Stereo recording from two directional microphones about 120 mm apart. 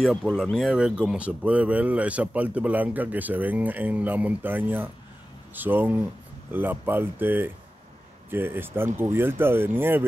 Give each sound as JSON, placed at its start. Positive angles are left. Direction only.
{"t": 0.0, "sound": "speech", "side_deg": 0}